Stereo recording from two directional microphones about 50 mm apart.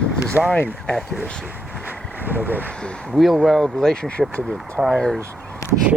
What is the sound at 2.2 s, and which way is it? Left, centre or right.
Speech, right.